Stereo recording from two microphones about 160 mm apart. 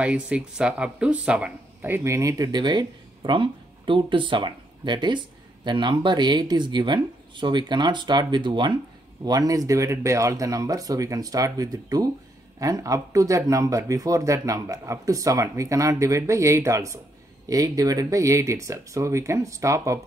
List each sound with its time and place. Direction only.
0.0 s speech: 10° right (ahead or behind)